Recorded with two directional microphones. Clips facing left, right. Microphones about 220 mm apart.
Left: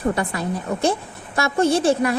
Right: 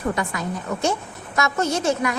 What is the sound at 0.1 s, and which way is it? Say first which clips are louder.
A woman's voice: left 3 dB; 35° left (ahead or behind).